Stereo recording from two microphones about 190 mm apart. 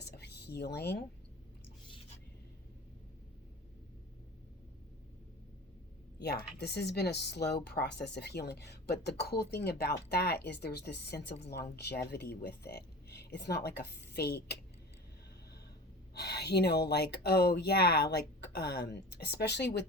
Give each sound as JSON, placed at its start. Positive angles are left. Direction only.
{"t": 0.0, "sound": "a sound", "side_deg": 60}
{"t": 6.2, "sound": "speech", "side_deg": 60}
{"t": 16.1, "sound": "speech", "side_deg": 60}